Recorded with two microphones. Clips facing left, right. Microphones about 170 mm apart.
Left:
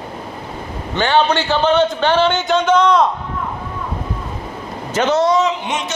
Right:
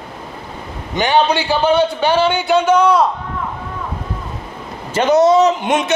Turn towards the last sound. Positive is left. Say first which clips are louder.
# right 5 dB
turn(degrees=-50)  # may be behind; listen again after turning